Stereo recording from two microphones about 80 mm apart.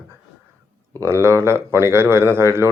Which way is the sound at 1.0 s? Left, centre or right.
Right.